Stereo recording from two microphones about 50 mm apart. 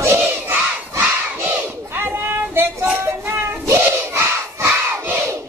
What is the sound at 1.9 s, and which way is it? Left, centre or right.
Child singing, right.